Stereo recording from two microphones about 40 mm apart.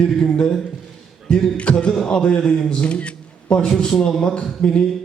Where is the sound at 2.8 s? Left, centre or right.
Left.